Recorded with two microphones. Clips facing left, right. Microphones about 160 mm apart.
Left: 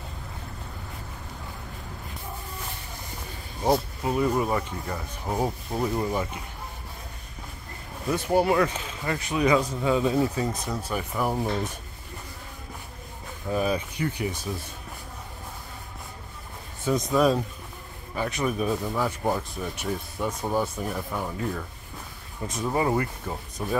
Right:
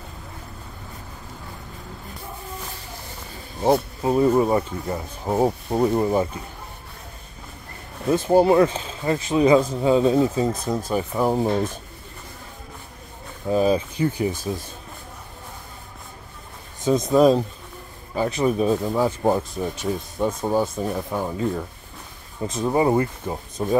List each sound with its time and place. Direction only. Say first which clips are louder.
4.0 s speech: right 6 dB; 30° right (ahead or behind)
8.3 s speech: right 6 dB; 30° right (ahead or behind)
13.5 s speech: right 7 dB; 25° right (ahead or behind)
16.8 s speech: right 6 dB; 25° right (ahead or behind)